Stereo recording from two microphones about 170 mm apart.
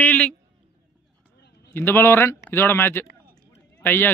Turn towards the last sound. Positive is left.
turn(degrees=10)  # may be behind; listen again after turning